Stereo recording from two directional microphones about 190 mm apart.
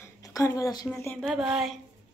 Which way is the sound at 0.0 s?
15° left (ahead or behind).